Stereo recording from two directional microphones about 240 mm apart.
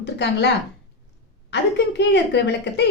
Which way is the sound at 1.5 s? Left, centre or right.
Left.